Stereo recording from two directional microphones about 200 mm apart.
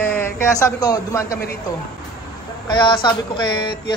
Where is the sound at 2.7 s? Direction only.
25° left (ahead or behind).